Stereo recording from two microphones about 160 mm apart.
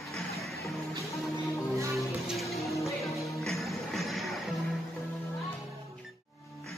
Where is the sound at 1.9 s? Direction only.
Centre (ahead or behind).